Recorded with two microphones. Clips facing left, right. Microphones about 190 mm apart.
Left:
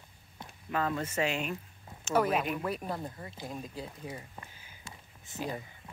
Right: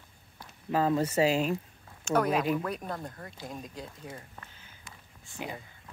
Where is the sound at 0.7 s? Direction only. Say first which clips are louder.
Right 6 dB; 30° right (ahead or behind).